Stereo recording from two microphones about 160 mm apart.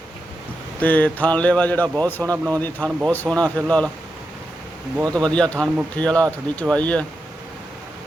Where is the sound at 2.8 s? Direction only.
10° left (ahead or behind).